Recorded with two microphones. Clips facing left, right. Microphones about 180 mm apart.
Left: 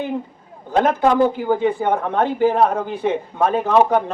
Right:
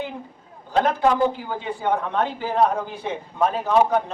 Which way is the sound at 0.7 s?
50° left (ahead or behind).